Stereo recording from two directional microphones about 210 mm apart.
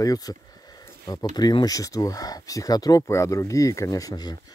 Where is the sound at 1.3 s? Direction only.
20° left (ahead or behind).